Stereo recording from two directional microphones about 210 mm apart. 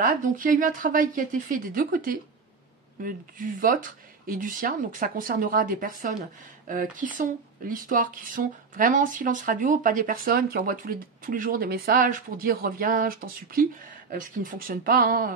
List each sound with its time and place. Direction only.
0.0 s speech: 40° right (ahead or behind)